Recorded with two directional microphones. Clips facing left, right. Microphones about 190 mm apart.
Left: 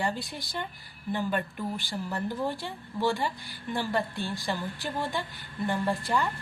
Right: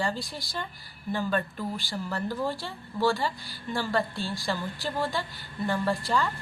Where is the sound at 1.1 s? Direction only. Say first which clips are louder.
Right 1 dB; 15° left (ahead or behind).